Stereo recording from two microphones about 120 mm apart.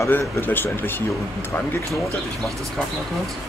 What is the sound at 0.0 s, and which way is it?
Speech, 20° left (ahead or behind).